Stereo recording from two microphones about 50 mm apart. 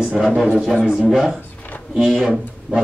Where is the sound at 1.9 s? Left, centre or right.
Centre.